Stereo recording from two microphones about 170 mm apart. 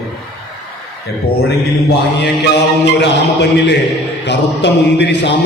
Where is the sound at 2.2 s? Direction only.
80° left.